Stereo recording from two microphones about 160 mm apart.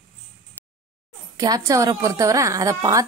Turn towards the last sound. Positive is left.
turn(degrees=-20)  # may be behind; listen again after turning